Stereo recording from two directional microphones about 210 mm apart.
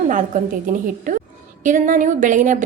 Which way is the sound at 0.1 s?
40° right (ahead or behind).